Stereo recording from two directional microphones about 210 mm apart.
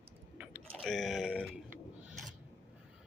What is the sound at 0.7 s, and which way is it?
Speech, centre (ahead or behind).